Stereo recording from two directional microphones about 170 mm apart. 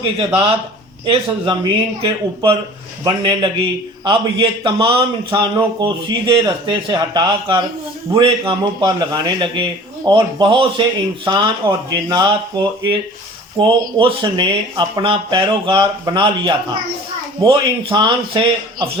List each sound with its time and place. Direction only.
1.0 s a man's voice: 30° right (ahead or behind)